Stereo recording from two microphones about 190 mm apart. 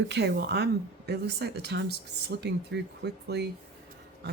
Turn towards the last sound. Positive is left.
turn(degrees=-60)  # may be behind; listen again after turning